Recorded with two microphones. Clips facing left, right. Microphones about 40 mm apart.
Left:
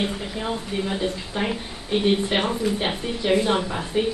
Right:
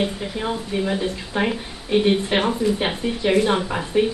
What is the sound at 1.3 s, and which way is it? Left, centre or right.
Speech, right.